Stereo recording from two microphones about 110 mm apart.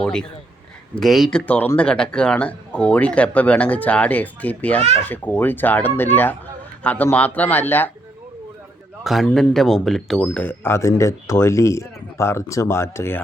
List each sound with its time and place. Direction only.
0.0 s a man's voice: 5° left (ahead or behind)
9.2 s speech: 5° left (ahead or behind)
10.3 s speech: 20° left (ahead or behind)